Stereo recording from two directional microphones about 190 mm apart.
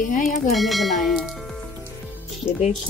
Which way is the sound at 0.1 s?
45° left (ahead or behind).